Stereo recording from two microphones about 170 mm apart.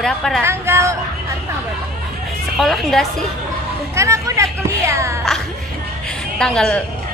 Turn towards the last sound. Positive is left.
turn(degrees=5)  # may be behind; listen again after turning